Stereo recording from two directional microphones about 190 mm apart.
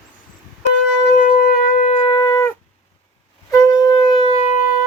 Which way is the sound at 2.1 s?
20° left (ahead or behind).